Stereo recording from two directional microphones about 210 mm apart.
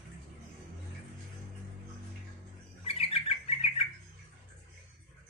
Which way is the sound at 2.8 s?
30° left (ahead or behind).